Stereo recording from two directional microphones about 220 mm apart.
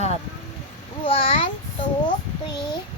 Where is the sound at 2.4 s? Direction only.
20° left (ahead or behind).